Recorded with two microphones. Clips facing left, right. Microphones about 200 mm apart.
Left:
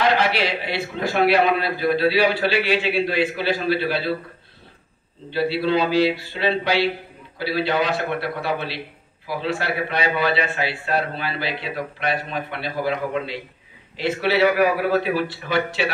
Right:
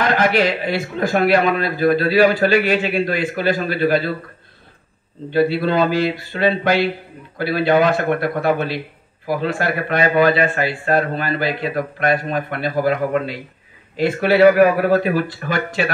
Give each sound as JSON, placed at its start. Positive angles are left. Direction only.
{"t": 0.0, "sound": "a man's voice", "side_deg": -45}
{"t": 5.3, "sound": "a man's voice", "side_deg": -50}